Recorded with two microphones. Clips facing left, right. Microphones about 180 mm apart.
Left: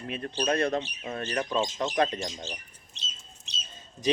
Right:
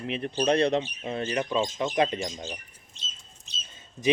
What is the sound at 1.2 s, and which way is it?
Speech, 10° right (ahead or behind).